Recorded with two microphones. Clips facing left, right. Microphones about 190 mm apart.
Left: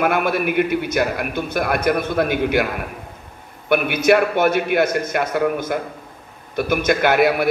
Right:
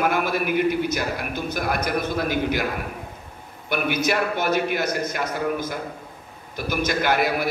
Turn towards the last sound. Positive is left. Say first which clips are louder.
# left 6 dB
turn(degrees=55)  # may be behind; listen again after turning